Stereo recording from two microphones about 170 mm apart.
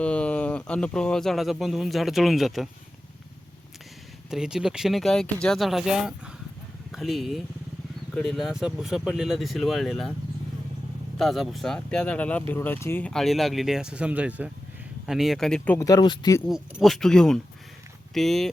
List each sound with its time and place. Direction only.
0.0 s speech: 5° left (ahead or behind)
4.3 s speech: 5° right (ahead or behind)
11.2 s speech: centre (ahead or behind)
15.9 s speech: 25° left (ahead or behind)
16.5 s speech: centre (ahead or behind)